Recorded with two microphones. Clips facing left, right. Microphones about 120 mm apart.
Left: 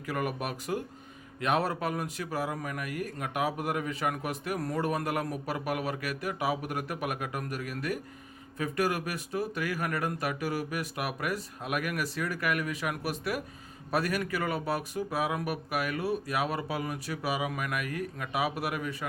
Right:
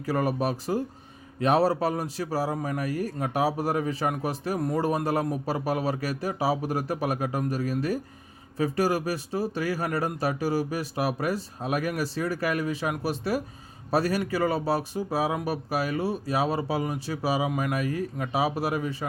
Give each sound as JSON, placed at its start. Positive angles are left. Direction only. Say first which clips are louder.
{"t": 0.0, "sound": "a man's voice", "louder": "right 7 dB", "side_deg": -35}